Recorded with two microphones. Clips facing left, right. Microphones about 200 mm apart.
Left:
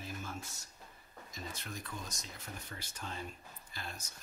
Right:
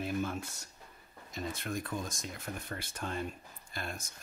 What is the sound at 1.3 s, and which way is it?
Speech, 55° right (ahead or behind).